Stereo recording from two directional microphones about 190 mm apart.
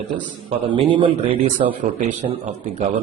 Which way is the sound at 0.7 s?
25° right (ahead or behind).